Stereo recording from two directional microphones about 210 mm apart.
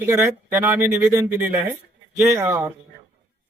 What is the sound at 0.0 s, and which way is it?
A man's voice, 10° right (ahead or behind).